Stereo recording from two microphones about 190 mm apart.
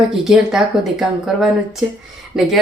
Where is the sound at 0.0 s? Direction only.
5° right (ahead or behind).